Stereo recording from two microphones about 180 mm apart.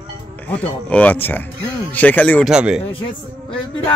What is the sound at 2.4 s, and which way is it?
Speech, 5° right (ahead or behind).